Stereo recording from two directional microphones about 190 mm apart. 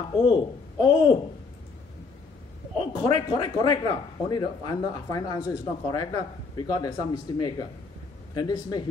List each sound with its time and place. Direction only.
0.2 s a man's voice: 25° left (ahead or behind)
2.8 s a man's voice: 25° left (ahead or behind)